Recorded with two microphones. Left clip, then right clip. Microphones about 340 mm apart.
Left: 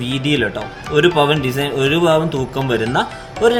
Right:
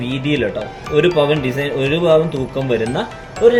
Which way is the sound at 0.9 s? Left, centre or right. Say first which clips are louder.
Left 1 dB; left.